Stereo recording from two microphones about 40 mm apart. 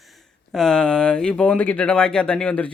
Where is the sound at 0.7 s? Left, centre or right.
Left.